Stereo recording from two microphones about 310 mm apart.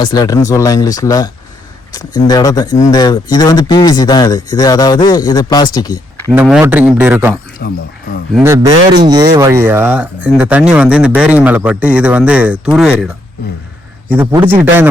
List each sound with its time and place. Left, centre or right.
0.0 s speech: centre
6.3 s speech: centre
7.6 s speech: left
8.3 s a man's voice: centre
14.1 s a man's voice: centre